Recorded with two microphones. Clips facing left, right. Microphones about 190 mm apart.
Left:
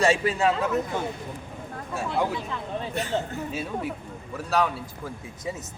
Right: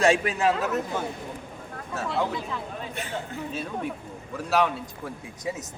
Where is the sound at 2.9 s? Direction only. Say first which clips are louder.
Left 9 dB; 40° left (ahead or behind).